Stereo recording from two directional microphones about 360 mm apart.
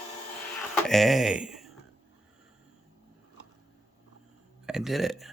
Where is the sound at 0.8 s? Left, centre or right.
Centre.